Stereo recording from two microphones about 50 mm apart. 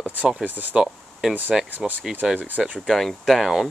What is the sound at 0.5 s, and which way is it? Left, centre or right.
Speech, right.